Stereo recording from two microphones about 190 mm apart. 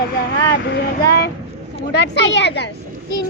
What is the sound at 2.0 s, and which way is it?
Speech, 70° left (ahead or behind).